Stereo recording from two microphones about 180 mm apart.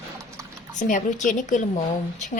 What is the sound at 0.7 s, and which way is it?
Speech, 45° left (ahead or behind).